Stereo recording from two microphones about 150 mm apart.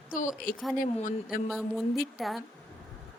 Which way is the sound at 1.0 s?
60° left (ahead or behind).